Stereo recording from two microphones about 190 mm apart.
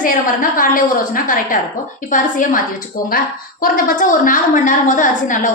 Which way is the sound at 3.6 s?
45° left (ahead or behind).